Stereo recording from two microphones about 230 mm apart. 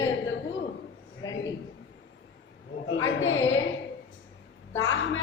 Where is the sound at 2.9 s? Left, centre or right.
Left.